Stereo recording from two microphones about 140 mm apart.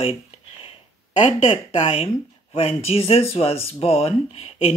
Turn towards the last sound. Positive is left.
turn(degrees=45)  # may be behind; listen again after turning